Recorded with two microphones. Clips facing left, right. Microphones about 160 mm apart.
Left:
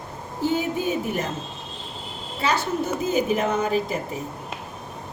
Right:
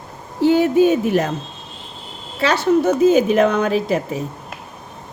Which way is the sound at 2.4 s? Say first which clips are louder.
Right 8 dB; 80° right.